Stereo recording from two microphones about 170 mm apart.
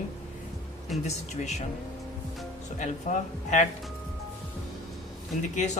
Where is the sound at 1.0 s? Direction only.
40° left (ahead or behind).